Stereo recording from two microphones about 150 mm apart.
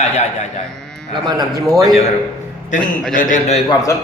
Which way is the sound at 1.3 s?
25° right (ahead or behind).